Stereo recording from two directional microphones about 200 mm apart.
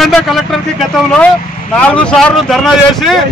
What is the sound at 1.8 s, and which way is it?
Speech, 5° left (ahead or behind).